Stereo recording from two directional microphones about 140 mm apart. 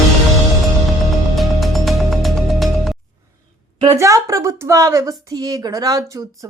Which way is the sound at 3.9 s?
20° right (ahead or behind).